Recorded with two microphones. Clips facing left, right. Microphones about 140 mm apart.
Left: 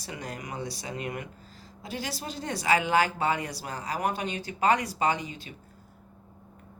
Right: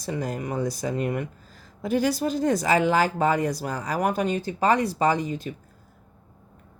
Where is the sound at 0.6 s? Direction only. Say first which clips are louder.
Right 8 dB; 45° right (ahead or behind).